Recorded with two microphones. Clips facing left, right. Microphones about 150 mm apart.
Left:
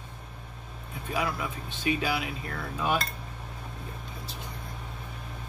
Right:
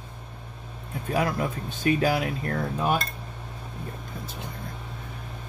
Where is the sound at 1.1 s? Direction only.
45° right (ahead or behind).